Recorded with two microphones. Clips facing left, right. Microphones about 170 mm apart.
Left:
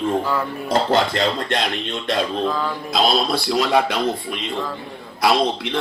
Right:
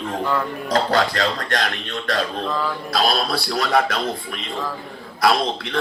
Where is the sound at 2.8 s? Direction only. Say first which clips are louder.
Left 3 dB; 20° left (ahead or behind).